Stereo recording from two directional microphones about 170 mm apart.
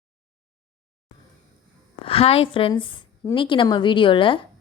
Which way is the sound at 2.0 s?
35° left (ahead or behind).